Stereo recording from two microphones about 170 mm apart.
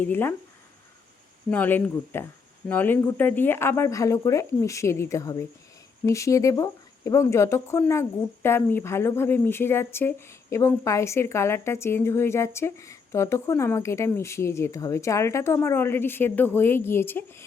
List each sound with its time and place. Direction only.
0.0 s speech: 10° left (ahead or behind)
1.5 s speech: 10° left (ahead or behind)